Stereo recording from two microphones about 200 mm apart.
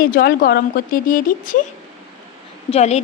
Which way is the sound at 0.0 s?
50° left (ahead or behind).